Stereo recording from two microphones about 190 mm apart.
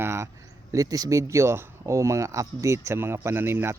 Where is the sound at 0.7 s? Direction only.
20° right (ahead or behind).